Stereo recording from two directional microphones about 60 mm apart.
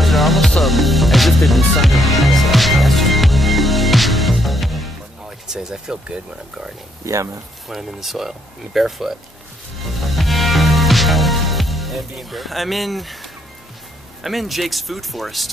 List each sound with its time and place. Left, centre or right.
0.0 s music: centre
5.5 s speech: centre
7.1 s speech: right
7.6 s speech: centre
9.8 s music: centre
14.2 s speech: centre